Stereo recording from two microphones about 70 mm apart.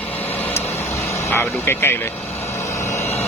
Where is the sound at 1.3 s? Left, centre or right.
Left.